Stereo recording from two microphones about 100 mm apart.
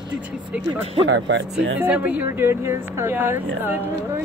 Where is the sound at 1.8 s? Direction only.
15° right (ahead or behind).